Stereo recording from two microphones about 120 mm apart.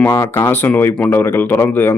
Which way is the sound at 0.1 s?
20° left (ahead or behind).